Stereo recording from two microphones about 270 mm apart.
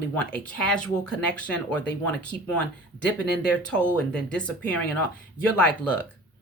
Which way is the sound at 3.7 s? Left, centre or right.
Centre.